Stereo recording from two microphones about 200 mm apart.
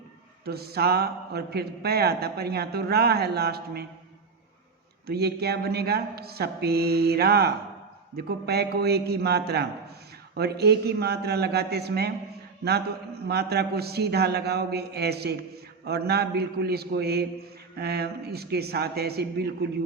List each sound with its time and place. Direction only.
0.4 s a man's voice: 50° right (ahead or behind)
5.0 s a man's voice: 55° right (ahead or behind)